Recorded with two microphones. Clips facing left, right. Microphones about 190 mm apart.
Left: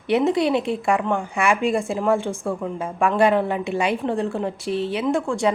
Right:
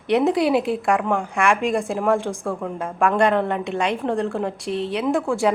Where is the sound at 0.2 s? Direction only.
Centre (ahead or behind).